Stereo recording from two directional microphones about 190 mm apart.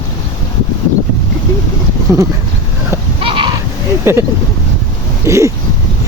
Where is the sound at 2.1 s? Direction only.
15° right (ahead or behind).